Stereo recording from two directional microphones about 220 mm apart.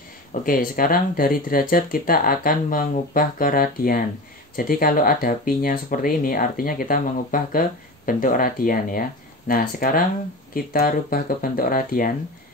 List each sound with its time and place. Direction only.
0.3 s speech: 40° left (ahead or behind)